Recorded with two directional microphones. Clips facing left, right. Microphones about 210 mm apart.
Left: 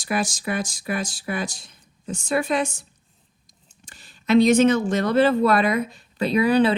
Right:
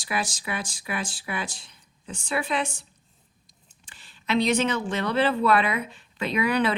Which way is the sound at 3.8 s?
45° left (ahead or behind).